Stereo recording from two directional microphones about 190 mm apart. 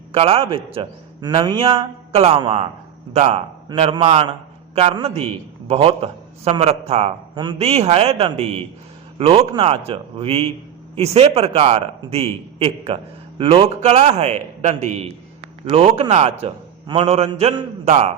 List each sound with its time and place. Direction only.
0.1 s a man's voice: 30° right (ahead or behind)